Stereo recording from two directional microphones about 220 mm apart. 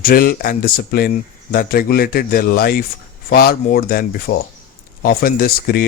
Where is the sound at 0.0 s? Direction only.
40° left (ahead or behind).